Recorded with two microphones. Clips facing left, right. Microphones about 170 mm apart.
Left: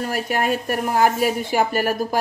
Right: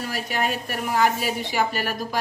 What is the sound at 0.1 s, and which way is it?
A woman's voice, 50° left (ahead or behind).